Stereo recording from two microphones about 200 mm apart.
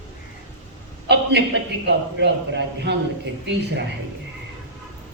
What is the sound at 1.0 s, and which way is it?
A man's voice, 60° right (ahead or behind).